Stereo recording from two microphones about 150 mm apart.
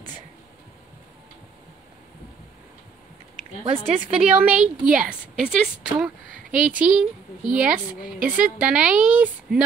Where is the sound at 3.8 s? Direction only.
5° right (ahead or behind).